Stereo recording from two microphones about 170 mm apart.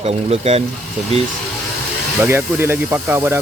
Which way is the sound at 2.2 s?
15° right (ahead or behind).